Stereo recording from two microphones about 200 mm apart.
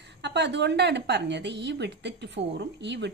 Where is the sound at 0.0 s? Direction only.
60° right (ahead or behind).